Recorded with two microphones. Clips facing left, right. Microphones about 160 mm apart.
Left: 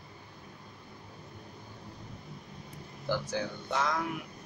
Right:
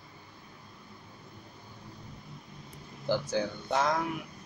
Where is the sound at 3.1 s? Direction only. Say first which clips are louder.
Right 3 dB; 20° right (ahead or behind).